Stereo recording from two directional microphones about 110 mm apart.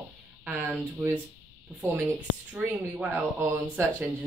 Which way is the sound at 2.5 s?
10° right (ahead or behind).